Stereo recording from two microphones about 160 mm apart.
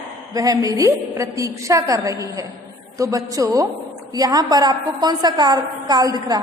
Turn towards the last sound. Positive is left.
turn(degrees=-25)  # may be behind; listen again after turning